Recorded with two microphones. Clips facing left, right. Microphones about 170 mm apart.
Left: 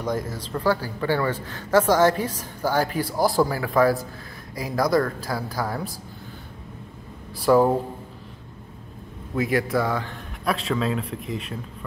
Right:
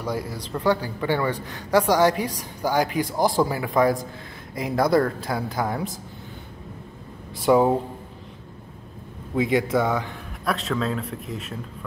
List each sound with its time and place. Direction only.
0.0 s a man's voice: 10° right (ahead or behind)
7.3 s a woman's voice: 25° right (ahead or behind)
9.3 s a woman's voice: 20° right (ahead or behind)
10.4 s a man's voice: centre (ahead or behind)